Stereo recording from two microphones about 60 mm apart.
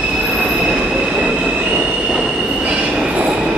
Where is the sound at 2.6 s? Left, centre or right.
Right.